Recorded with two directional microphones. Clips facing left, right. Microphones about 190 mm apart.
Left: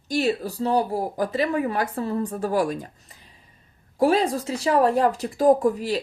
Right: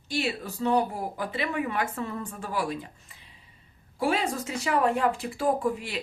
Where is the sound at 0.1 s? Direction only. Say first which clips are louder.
Left 7 dB; 40° left (ahead or behind).